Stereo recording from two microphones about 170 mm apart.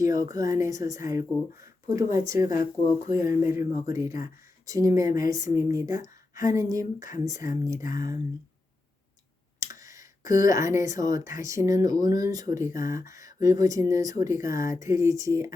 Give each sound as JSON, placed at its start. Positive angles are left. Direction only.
{"t": 0.0, "sound": "speech", "side_deg": -20}
{"t": 9.6, "sound": "a sound", "side_deg": -20}
{"t": 11.3, "sound": "speech", "side_deg": -20}